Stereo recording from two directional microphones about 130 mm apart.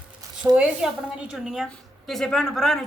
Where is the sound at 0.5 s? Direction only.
5° right (ahead or behind).